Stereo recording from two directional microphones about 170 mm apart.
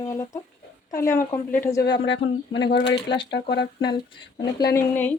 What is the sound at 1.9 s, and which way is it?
Speech, 90° left.